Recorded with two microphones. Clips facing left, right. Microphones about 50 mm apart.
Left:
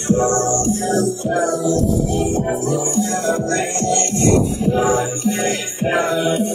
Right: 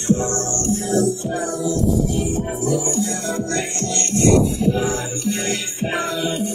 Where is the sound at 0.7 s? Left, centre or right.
Left.